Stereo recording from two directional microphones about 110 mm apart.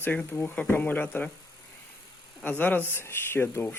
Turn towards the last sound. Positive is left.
turn(degrees=20)  # may be behind; listen again after turning